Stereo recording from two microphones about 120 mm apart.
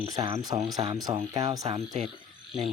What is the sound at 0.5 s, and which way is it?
Speech, 50° right (ahead or behind).